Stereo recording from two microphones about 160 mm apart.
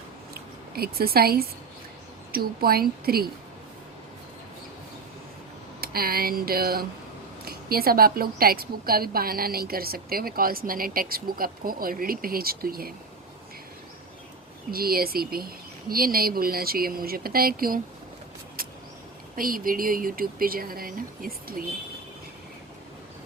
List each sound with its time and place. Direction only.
0.7 s a woman's voice: 70° right (ahead or behind)
5.8 s a woman's voice: 70° right (ahead or behind)
14.7 s a woman's voice: 70° right (ahead or behind)
19.4 s speech: 60° right (ahead or behind)